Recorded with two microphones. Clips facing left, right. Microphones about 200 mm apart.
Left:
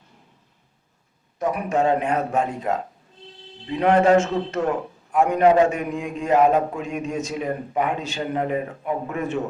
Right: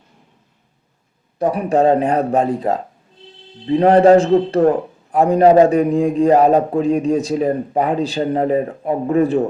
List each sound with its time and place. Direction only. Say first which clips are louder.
1.4 s a man's voice: right 6 dB; 35° right (ahead or behind)